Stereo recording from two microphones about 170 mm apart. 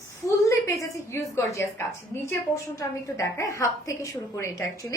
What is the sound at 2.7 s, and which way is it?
A woman's voice, 20° left (ahead or behind).